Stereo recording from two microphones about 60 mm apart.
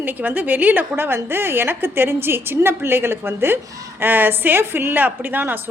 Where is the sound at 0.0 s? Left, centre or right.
Right.